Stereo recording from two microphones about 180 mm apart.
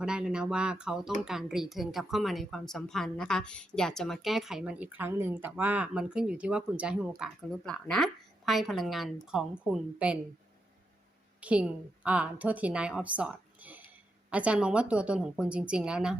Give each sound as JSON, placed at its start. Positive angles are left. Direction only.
{"t": 0.0, "sound": "a woman's voice", "side_deg": -5}
{"t": 11.3, "sound": "a woman's voice", "side_deg": -5}